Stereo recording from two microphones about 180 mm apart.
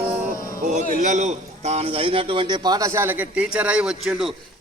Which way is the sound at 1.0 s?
40° right (ahead or behind).